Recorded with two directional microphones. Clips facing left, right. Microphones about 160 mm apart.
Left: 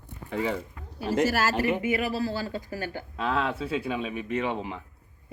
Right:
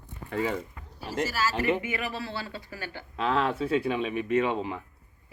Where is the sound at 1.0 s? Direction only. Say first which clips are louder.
Left 5 dB; 55° left (ahead or behind).